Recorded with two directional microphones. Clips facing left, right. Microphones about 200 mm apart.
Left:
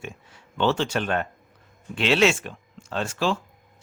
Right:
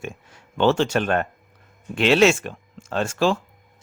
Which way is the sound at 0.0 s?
45° right (ahead or behind).